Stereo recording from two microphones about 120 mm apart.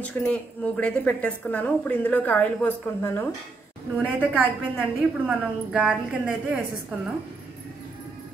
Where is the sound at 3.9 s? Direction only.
15° right (ahead or behind).